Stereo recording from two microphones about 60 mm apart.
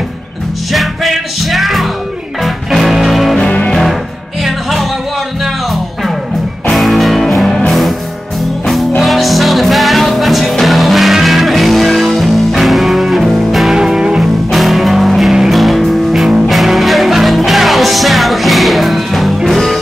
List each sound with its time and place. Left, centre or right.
0.7 s music: centre
3.3 s music: centre
4.5 s music: centre
6.7 s music: centre
9.0 s music: centre